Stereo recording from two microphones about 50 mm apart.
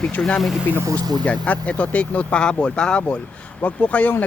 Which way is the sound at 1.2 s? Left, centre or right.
Left.